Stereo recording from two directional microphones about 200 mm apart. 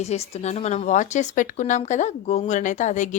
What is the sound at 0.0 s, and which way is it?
A woman's voice, 30° left (ahead or behind).